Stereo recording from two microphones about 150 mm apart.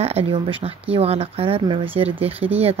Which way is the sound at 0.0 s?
40° right (ahead or behind).